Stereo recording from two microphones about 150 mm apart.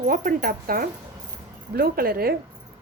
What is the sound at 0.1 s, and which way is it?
Speech, 70° right (ahead or behind).